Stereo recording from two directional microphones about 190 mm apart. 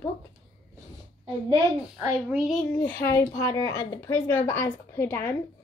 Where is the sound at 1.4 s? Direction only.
20° right (ahead or behind).